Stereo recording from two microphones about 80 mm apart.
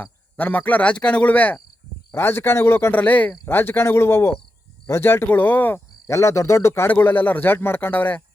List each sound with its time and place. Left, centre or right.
0.0 s speech: left
2.1 s speech: left
2.9 s speech: centre
3.4 s speech: left
6.1 s speech: left
6.8 s speech: left